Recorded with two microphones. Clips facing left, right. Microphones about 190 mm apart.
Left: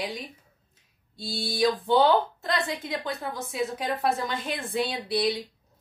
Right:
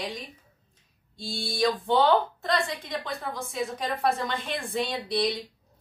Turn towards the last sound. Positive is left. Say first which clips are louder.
# left 1 dB
turn(degrees=0)  # may be behind; listen again after turning